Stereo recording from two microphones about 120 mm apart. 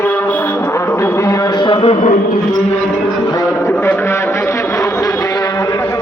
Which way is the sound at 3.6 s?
15° left (ahead or behind).